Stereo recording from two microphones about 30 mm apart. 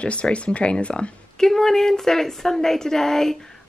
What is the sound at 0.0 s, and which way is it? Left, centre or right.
Speech, left.